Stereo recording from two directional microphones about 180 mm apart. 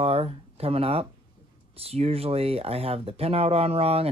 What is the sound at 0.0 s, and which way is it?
Speech, 35° right (ahead or behind).